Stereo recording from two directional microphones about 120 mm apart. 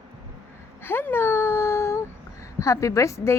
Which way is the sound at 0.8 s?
20° left (ahead or behind).